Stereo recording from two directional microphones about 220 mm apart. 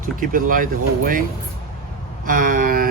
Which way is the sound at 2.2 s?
40° right (ahead or behind).